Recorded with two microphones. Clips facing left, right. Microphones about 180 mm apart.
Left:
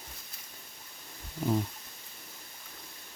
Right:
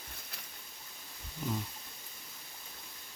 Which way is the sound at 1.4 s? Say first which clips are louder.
Left 7 dB; 55° left (ahead or behind).